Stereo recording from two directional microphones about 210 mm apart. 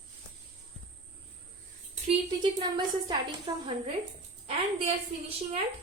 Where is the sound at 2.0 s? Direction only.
20° right (ahead or behind).